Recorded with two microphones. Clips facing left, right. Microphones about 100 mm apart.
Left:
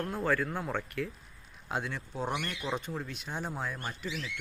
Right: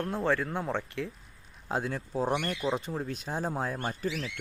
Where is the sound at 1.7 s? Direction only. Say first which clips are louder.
Right 4 dB; 35° right (ahead or behind).